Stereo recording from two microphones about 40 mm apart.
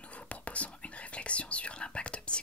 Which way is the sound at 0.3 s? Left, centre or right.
Left.